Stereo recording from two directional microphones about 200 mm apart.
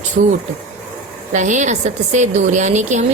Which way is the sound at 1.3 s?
40° right (ahead or behind).